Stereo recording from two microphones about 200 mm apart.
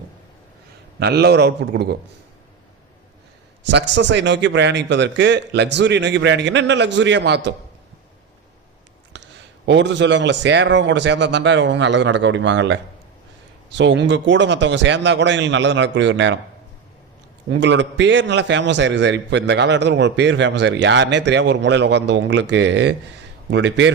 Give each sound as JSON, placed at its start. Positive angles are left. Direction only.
{"t": 0.9, "sound": "a man's voice", "side_deg": -55}
{"t": 3.6, "sound": "a man's voice", "side_deg": -60}
{"t": 9.1, "sound": "a man's voice", "side_deg": -65}
{"t": 17.5, "sound": "a man's voice", "side_deg": -65}